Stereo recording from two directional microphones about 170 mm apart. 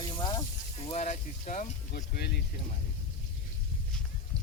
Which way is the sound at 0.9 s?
45° left (ahead or behind).